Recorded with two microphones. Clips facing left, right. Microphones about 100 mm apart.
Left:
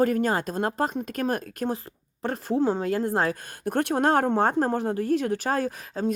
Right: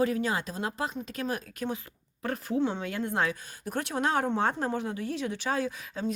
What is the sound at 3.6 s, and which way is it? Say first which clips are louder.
Speech: left 7 dB; 55° left (ahead or behind).